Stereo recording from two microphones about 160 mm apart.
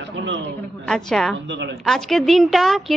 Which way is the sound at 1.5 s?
90° right.